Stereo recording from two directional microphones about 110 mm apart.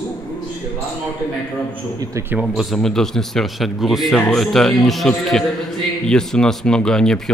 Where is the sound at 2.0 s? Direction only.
30° right (ahead or behind).